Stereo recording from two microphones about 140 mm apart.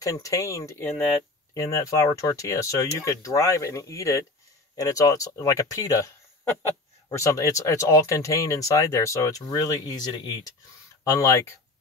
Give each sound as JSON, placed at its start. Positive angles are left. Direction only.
{"t": 0.0, "sound": "speech", "side_deg": 25}